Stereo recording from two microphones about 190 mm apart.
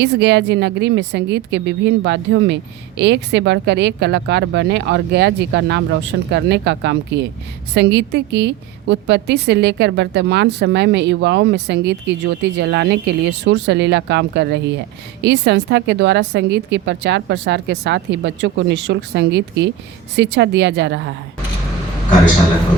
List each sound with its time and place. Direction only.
0.0 s a woman's voice: 65° right (ahead or behind)